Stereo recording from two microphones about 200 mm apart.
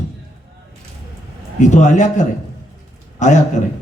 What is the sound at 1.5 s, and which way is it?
A man's voice, 35° left (ahead or behind).